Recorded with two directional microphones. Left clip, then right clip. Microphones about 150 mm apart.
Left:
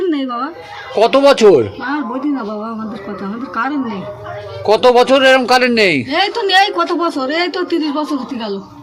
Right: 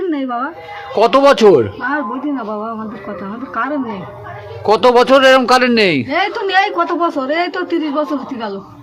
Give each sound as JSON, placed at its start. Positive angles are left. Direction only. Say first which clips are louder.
{"t": 0.1, "sound": "a sound", "louder": "even", "side_deg": -5}
{"t": 0.9, "sound": "speech", "louder": "even", "side_deg": -25}
{"t": 3.5, "sound": "speech", "louder": "even", "side_deg": -10}
{"t": 4.6, "sound": "a man's voice", "louder": "even", "side_deg": -30}
{"t": 6.1, "sound": "speech", "louder": "left 2 dB", "side_deg": -10}